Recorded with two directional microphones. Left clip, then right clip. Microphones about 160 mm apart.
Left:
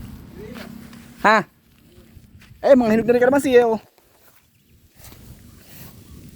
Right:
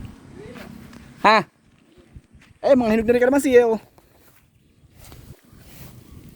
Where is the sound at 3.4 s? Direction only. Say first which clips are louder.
Even; 40° right (ahead or behind).